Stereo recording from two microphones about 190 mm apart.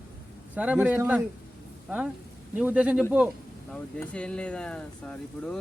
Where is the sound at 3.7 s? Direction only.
5° left (ahead or behind).